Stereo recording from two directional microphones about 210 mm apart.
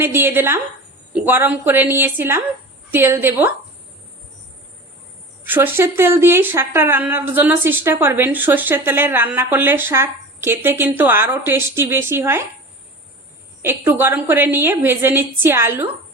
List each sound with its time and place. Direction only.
0.0 s speech: 10° right (ahead or behind)
5.5 s speech: 10° right (ahead or behind)
13.6 s speech: 10° right (ahead or behind)